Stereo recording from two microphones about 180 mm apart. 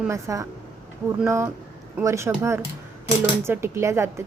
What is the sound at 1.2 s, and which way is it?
A woman's voice, 15° right (ahead or behind).